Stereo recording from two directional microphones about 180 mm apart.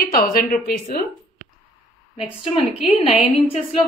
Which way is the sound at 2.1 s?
35° left (ahead or behind).